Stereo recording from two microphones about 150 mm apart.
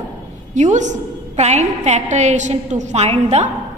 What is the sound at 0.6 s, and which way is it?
A woman's voice, 55° right (ahead or behind).